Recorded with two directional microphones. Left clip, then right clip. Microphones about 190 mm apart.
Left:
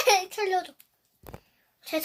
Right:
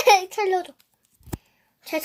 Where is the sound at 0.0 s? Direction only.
20° right (ahead or behind).